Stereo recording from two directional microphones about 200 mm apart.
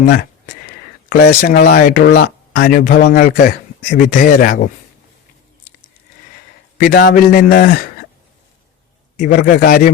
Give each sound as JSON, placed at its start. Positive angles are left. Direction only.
{"t": 0.0, "sound": "speech", "side_deg": 45}
{"t": 6.7, "sound": "speech", "side_deg": 45}
{"t": 9.1, "sound": "speech", "side_deg": 45}